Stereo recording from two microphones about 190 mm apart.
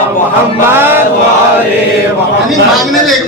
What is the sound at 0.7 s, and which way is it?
Chant, 10° right (ahead or behind).